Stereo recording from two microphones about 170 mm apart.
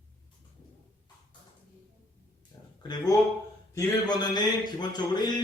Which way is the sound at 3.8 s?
25° left (ahead or behind).